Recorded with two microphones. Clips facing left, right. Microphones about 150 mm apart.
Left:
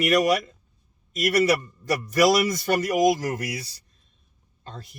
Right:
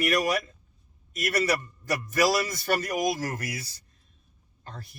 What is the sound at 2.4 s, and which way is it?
Speech, 20° left (ahead or behind).